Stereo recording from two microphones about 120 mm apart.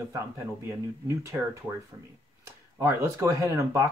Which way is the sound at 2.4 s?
25° right (ahead or behind).